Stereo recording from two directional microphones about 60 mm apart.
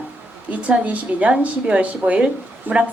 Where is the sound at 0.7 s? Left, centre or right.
Right.